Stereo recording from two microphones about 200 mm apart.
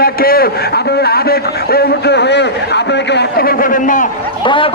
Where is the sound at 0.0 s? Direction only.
50° left (ahead or behind).